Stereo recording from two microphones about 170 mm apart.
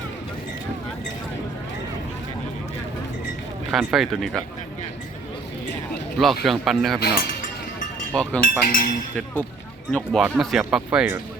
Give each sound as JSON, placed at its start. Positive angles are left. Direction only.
{"t": 3.7, "sound": "speech", "side_deg": -5}
{"t": 6.1, "sound": "speech", "side_deg": 0}
{"t": 8.1, "sound": "speech", "side_deg": 5}
{"t": 8.4, "sound": "speech", "side_deg": 55}
{"t": 9.9, "sound": "speech", "side_deg": 0}